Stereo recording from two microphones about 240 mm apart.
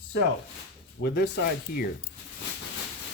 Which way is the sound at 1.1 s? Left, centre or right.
Left.